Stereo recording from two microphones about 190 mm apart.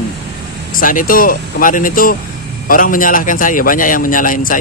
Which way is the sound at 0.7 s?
45° left (ahead or behind).